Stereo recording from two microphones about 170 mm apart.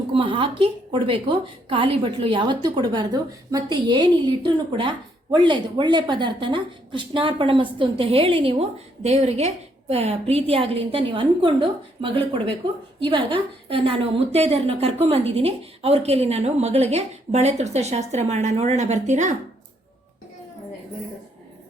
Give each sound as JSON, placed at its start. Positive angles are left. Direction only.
{"t": 0.1, "sound": "a woman's voice", "side_deg": -30}